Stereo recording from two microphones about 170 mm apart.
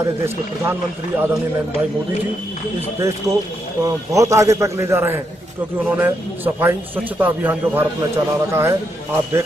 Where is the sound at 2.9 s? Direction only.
15° right (ahead or behind).